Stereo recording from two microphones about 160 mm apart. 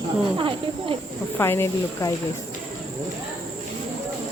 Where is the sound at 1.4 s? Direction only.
15° left (ahead or behind).